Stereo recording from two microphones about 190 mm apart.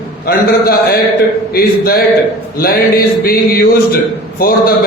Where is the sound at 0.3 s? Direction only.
50° left (ahead or behind).